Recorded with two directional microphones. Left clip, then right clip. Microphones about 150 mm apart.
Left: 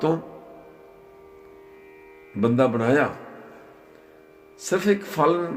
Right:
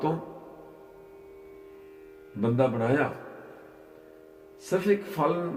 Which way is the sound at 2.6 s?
90° left.